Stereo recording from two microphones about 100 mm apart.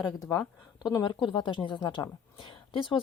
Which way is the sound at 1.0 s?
50° left (ahead or behind).